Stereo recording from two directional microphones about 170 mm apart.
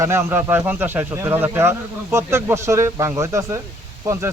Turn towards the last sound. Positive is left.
turn(degrees=-15)  # may be behind; listen again after turning